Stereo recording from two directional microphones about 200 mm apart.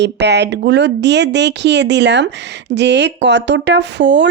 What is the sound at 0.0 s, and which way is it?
Speech, 60° right (ahead or behind).